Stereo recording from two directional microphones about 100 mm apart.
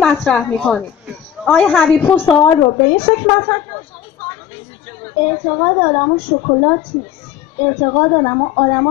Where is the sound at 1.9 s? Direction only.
20° left (ahead or behind).